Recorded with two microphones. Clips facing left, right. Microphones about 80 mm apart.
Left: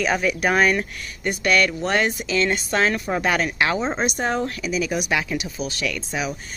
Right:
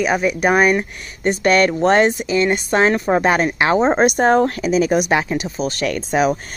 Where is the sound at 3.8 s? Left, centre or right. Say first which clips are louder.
Right 9 dB; right.